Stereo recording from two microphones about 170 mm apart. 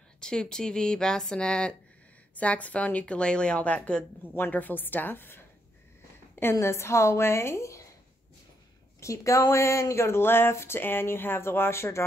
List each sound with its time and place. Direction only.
0.2 s speech: 5° left (ahead or behind)
6.4 s speech: 15° left (ahead or behind)
9.0 s speech: 20° left (ahead or behind)